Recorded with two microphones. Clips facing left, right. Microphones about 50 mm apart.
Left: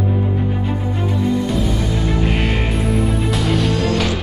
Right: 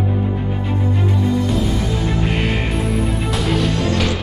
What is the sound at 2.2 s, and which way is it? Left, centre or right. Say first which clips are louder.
Music: left 1 dB; centre.